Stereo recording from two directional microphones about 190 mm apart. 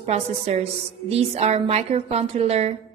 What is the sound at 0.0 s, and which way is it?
A woman's voice, 35° right (ahead or behind).